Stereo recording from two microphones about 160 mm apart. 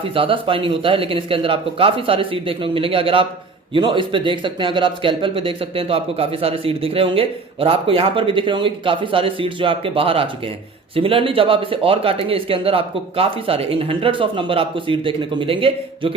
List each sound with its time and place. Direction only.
0.0 s speech: 35° right (ahead or behind)